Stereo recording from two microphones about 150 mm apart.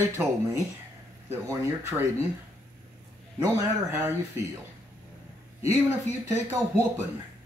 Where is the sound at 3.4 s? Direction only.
15° right (ahead or behind).